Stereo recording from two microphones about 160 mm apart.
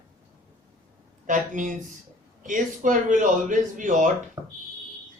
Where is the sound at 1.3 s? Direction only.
55° right (ahead or behind).